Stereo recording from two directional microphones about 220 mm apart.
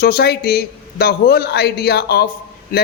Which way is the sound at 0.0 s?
45° left (ahead or behind).